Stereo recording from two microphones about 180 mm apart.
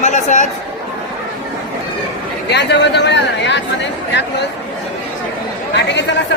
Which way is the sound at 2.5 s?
75° left (ahead or behind).